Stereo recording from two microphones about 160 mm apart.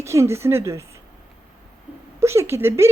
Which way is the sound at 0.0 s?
15° right (ahead or behind).